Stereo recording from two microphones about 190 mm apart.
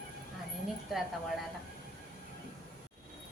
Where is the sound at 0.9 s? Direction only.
Centre (ahead or behind).